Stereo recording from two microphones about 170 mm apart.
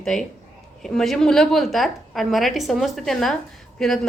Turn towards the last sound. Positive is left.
turn(degrees=0)  # may be behind; listen again after turning